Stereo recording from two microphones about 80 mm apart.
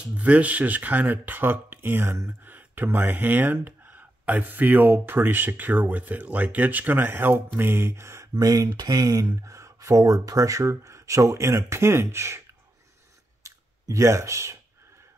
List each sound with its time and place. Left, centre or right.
0.1 s speech: centre; by 8.3 s right
8.4 s speech: right
13.4 s clicking: right